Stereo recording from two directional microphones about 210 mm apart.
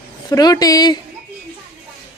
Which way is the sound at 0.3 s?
20° left (ahead or behind).